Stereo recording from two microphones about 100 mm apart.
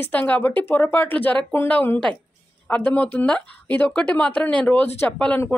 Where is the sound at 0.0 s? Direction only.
15° left (ahead or behind).